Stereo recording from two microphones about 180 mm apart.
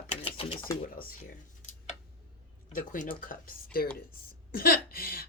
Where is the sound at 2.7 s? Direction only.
45° left (ahead or behind).